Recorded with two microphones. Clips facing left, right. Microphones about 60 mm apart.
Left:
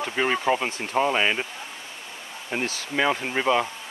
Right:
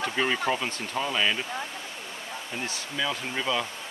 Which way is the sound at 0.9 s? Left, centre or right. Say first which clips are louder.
Left 5 dB; left.